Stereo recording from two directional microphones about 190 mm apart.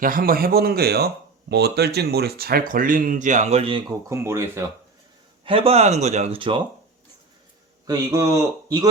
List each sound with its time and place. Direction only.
0.0 s speech: 50° right (ahead or behind); by 3.9 s 25° right (ahead or behind)
4.1 s speech: 15° right (ahead or behind)
5.5 s speech: 30° right (ahead or behind)
7.9 s a man's voice: 20° right (ahead or behind)